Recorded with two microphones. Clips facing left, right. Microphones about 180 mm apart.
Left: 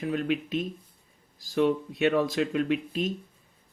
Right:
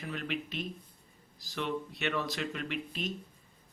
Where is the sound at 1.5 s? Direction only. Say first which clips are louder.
Left 11 dB; 45° left (ahead or behind).